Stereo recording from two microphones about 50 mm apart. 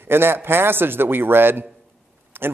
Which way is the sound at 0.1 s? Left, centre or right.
Right.